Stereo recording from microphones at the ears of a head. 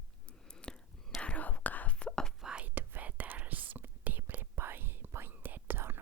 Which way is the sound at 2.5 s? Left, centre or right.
Right.